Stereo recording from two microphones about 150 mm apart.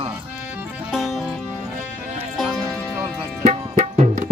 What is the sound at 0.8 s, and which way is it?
Music, centre (ahead or behind).